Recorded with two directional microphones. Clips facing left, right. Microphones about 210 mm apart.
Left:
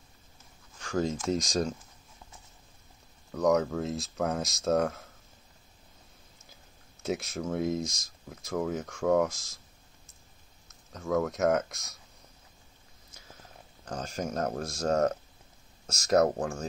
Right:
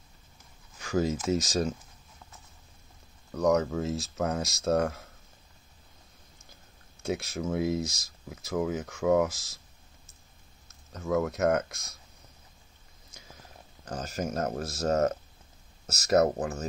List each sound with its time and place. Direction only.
0.7 s speech: 5° right (ahead or behind)
3.3 s speech: centre (ahead or behind)
7.0 s speech: centre (ahead or behind)
10.9 s speech: centre (ahead or behind)
13.8 s speech: 5° right (ahead or behind)